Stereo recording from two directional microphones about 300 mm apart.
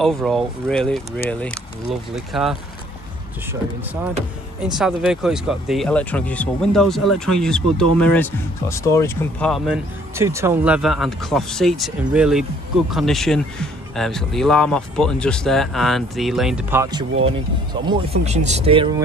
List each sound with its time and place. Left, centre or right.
0.0 s speech: centre
4.7 s speech: centre